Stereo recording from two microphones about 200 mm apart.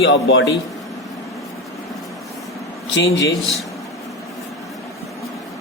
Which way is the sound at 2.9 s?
65° left (ahead or behind).